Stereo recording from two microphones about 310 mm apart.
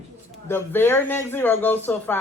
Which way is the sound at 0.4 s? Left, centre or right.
Centre.